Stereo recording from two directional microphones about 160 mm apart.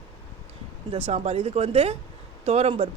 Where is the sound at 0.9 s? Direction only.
40° right (ahead or behind).